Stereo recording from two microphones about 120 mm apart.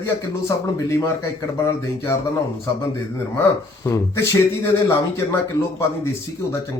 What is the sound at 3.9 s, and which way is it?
A man's voice, 20° left (ahead or behind).